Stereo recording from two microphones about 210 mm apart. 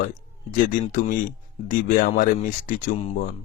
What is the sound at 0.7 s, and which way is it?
Speech, 40° left (ahead or behind).